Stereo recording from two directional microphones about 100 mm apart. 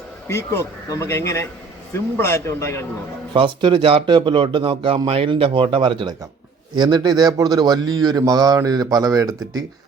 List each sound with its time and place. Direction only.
0.3 s speech: 30° left (ahead or behind)
3.3 s speech: 55° right (ahead or behind); by 9.6 s 40° right (ahead or behind)